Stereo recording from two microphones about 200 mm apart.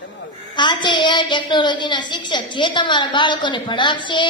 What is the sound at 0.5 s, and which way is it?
A woman's voice, 25° left (ahead or behind).